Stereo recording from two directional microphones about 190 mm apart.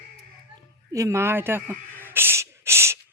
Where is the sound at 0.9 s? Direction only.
15° right (ahead or behind).